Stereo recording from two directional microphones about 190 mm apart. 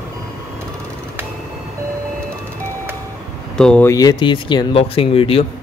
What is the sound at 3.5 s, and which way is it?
Speech, 5° left (ahead or behind).